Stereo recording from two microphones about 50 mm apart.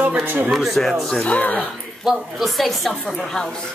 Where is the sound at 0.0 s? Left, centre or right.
Right.